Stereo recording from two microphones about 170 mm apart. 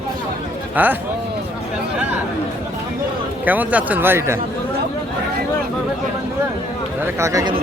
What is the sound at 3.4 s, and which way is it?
Speech, 10° right (ahead or behind).